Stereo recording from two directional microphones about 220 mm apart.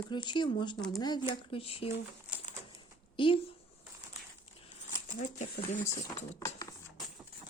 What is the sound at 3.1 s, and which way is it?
Speech, 25° left (ahead or behind).